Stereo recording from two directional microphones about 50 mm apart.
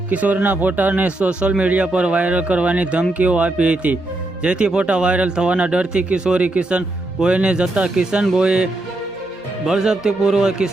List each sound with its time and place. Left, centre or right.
0.1 s a man's voice: right; by 10.7 s centre